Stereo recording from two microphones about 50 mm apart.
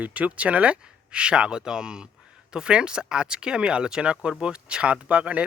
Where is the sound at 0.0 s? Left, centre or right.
Right.